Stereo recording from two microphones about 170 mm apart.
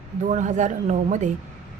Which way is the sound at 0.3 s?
45° right (ahead or behind).